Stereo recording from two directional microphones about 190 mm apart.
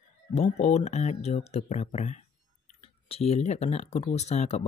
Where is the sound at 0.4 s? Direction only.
35° left (ahead or behind).